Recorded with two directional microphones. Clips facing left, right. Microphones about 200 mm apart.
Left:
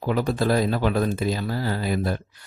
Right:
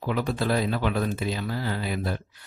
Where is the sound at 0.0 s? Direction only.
40° left (ahead or behind).